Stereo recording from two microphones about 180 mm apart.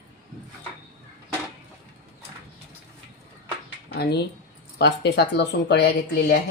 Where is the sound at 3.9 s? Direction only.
65° left (ahead or behind).